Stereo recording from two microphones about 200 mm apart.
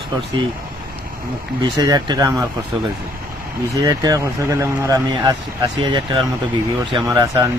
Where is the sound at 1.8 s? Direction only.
20° right (ahead or behind).